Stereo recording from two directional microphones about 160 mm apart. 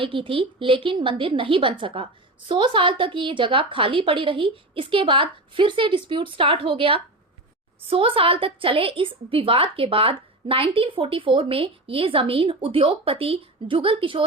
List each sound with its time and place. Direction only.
0.0 s a woman's voice: 35° right (ahead or behind)